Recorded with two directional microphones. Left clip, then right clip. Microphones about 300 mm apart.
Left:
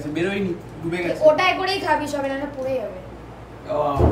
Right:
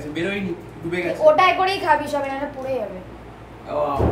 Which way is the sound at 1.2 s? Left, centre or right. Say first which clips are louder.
Right 2 dB; right.